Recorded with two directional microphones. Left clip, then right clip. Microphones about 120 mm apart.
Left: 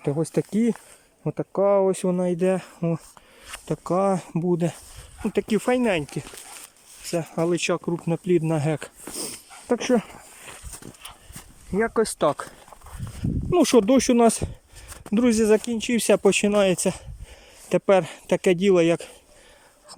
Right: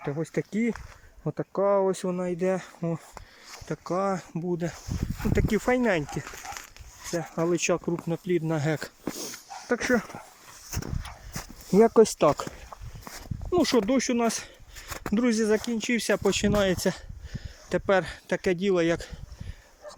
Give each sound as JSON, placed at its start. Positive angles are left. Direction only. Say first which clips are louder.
{"t": 0.0, "sound": "speech", "louder": "left 6 dB", "side_deg": 25}
{"t": 5.3, "sound": "speech", "louder": "left 3 dB", "side_deg": 15}
{"t": 8.0, "sound": "speech", "louder": "left 5 dB", "side_deg": 20}
{"t": 8.8, "sound": "speech", "louder": "even", "side_deg": 0}
{"t": 9.6, "sound": "speech", "louder": "left 3 dB", "side_deg": 25}
{"t": 10.7, "sound": "horse", "louder": "right 6 dB", "side_deg": -15}
{"t": 11.3, "sound": "speech", "louder": "right 5 dB", "side_deg": -15}
{"t": 13.5, "sound": "speech", "louder": "left 6 dB", "side_deg": 20}
{"t": 14.8, "sound": "a sound", "louder": "right 7 dB", "side_deg": -25}
{"t": 15.1, "sound": "speech", "louder": "left 5 dB", "side_deg": 20}